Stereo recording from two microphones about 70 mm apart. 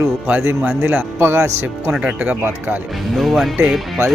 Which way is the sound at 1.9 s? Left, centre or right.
Centre.